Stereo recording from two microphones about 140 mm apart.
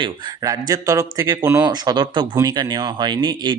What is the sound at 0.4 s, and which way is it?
Speech, 25° right (ahead or behind).